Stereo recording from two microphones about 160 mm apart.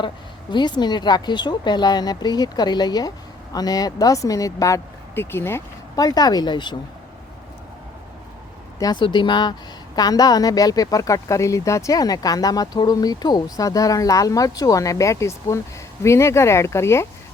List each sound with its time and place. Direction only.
0.5 s a woman's voice: 30° left (ahead or behind)
8.8 s a woman's voice: 30° left (ahead or behind)